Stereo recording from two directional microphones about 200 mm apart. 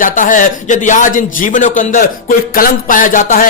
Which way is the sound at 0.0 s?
40° left (ahead or behind).